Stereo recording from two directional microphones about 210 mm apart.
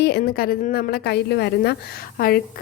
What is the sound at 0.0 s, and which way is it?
A woman's voice, 45° left (ahead or behind).